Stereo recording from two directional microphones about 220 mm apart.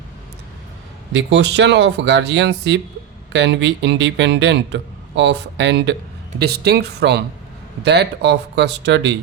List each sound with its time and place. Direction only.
1.1 s speech: 55° right (ahead or behind)